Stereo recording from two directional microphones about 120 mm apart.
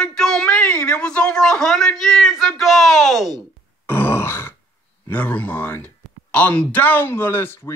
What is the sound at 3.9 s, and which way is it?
Grunt, 20° left (ahead or behind).